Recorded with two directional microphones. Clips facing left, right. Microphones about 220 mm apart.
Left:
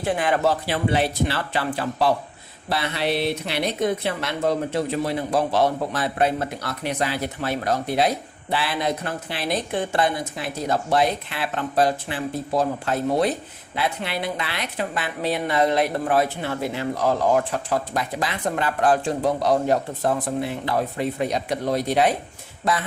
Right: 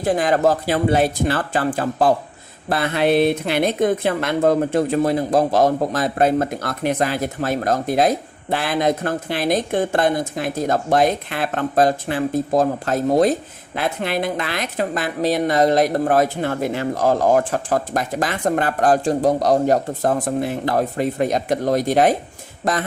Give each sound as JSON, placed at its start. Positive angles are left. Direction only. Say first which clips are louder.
{"t": 0.0, "sound": "speech", "louder": "right 4 dB", "side_deg": -40}